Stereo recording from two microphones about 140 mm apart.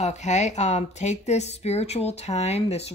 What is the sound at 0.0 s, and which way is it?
Speech, 55° left (ahead or behind).